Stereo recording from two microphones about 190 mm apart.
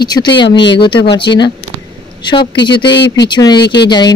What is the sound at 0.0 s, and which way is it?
Speech, 20° left (ahead or behind).